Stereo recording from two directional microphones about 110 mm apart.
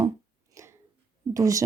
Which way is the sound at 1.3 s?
30° right (ahead or behind).